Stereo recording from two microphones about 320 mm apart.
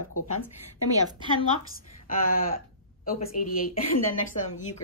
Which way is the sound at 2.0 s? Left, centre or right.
Left.